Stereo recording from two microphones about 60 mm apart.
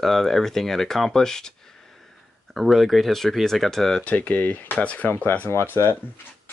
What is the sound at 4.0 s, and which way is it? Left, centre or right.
Speech, left.